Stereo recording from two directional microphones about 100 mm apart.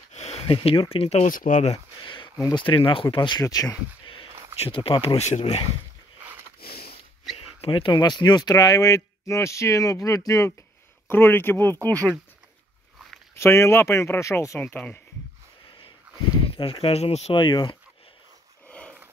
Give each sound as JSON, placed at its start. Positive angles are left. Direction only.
{"t": 0.1, "sound": "speech", "side_deg": 90}
{"t": 2.0, "sound": "a sound", "side_deg": 55}
{"t": 2.5, "sound": "speech", "side_deg": 55}
{"t": 4.0, "sound": "a sound", "side_deg": 60}
{"t": 4.6, "sound": "speech", "side_deg": 65}
{"t": 7.3, "sound": "speech", "side_deg": 60}
{"t": 11.1, "sound": "speech", "side_deg": 20}
{"t": 13.4, "sound": "speech", "side_deg": 25}
{"t": 14.6, "sound": "speech", "side_deg": 15}
{"t": 16.4, "sound": "speech", "side_deg": 65}
{"t": 17.3, "sound": "speech", "side_deg": 50}
{"t": 18.7, "sound": "a sound", "side_deg": 10}